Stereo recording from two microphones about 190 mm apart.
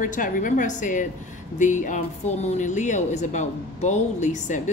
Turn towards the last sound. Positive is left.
turn(degrees=40)  # may be behind; listen again after turning